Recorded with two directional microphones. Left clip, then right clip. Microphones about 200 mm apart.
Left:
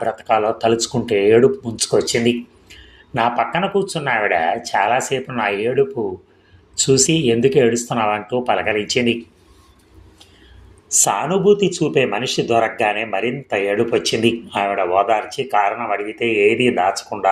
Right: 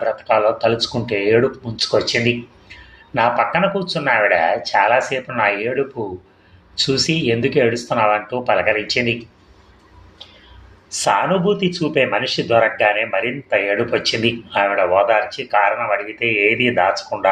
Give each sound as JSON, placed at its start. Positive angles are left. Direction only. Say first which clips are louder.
{"t": 0.0, "sound": "speech", "louder": "right 1 dB", "side_deg": 45}
{"t": 6.8, "sound": "speech", "louder": "left 3 dB", "side_deg": 40}
{"t": 11.0, "sound": "speech", "louder": "right 1 dB", "side_deg": 40}